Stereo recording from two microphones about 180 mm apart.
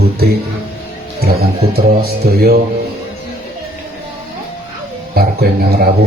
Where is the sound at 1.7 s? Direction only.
60° right (ahead or behind).